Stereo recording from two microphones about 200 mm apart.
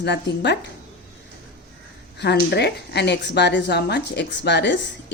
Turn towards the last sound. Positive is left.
turn(degrees=60)  # may be behind; listen again after turning